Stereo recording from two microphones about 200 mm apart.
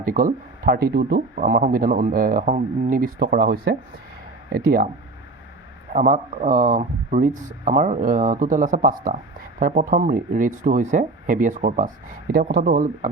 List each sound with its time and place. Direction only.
0.0 s speech: 40° right (ahead or behind)
5.9 s speech: 40° right (ahead or behind)